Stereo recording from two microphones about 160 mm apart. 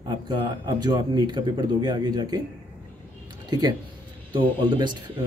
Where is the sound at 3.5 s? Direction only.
25° right (ahead or behind).